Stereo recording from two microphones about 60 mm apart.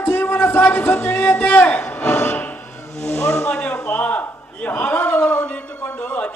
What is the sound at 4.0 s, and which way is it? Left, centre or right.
A man's voice, left.